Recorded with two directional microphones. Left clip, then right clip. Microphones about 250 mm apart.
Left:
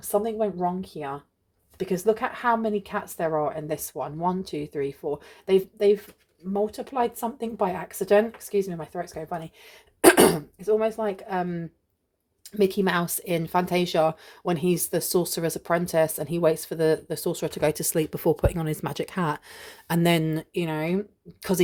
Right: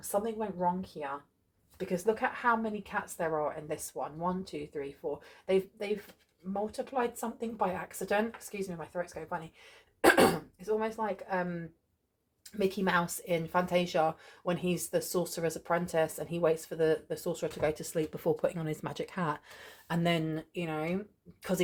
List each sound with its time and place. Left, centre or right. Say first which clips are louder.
0.1 s speech: left 8 dB; left